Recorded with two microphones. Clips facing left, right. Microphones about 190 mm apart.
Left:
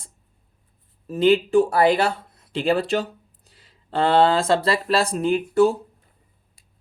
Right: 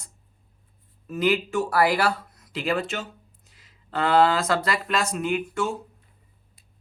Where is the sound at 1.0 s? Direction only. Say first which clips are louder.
Left 6 dB; 30° left (ahead or behind).